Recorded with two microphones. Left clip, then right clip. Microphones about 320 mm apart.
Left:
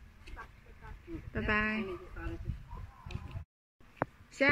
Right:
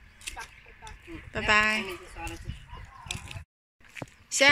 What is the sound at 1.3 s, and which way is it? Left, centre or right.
Speech, centre.